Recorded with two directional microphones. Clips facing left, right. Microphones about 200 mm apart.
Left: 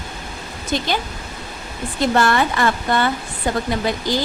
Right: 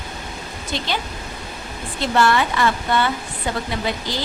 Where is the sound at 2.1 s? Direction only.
45° left (ahead or behind).